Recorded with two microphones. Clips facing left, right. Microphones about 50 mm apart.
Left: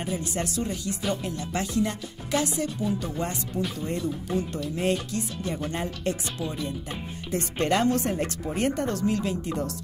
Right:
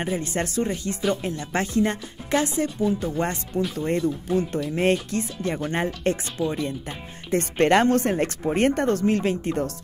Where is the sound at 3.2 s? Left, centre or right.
Right.